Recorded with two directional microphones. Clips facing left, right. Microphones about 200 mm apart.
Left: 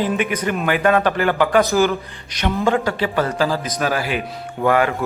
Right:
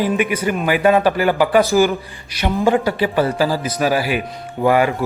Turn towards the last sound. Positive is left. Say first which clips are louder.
# right 2 dB
turn(degrees=-10)  # may be behind; listen again after turning